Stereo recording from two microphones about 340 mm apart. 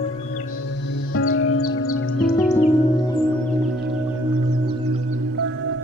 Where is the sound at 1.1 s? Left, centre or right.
Left.